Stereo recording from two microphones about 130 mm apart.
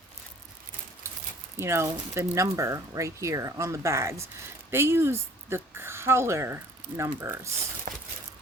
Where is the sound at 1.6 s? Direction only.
20° right (ahead or behind).